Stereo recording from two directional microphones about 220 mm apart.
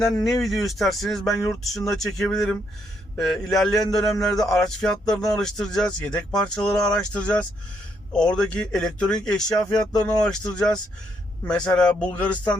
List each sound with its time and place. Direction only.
0.4 s speech: centre (ahead or behind)